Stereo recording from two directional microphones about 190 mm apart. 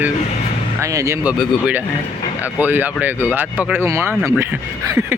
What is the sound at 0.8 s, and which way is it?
Speech, 15° right (ahead or behind).